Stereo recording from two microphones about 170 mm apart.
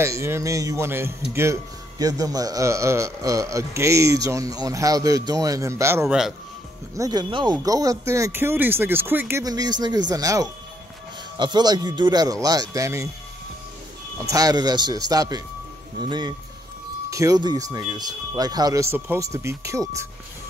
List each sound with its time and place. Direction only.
0.0 s speech: 15° right (ahead or behind)
14.3 s speech: 20° right (ahead or behind)